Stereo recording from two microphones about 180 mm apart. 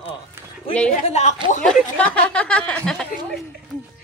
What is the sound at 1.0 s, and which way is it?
Speech, 35° left (ahead or behind).